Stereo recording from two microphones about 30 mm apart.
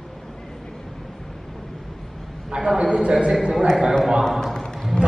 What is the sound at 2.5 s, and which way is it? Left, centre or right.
Speech, centre.